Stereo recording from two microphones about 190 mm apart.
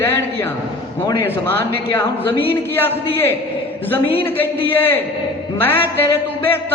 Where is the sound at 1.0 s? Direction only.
15° left (ahead or behind).